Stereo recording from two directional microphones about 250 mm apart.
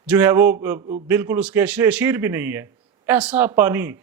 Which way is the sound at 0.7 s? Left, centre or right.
Right.